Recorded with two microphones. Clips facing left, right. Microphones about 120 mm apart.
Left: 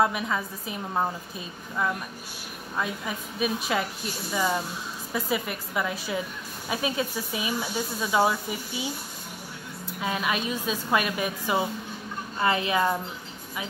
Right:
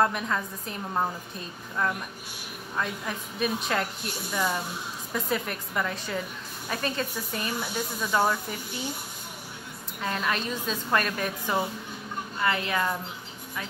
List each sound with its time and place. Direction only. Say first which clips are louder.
0.0 s a woman's voice: left 1 dB; 5° left (ahead or behind)
9.9 s speech: left 1 dB; 5° left (ahead or behind)
12.4 s speech: left 3 dB; 20° left (ahead or behind)